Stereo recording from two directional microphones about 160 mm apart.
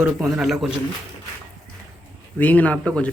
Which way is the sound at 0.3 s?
Centre (ahead or behind).